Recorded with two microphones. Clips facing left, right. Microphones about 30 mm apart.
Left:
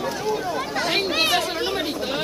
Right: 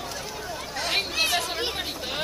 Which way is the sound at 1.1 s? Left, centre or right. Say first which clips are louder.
Left 5 dB; left.